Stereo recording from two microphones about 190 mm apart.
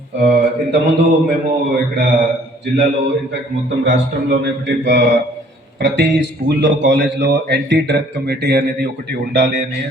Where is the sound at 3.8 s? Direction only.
65° right (ahead or behind).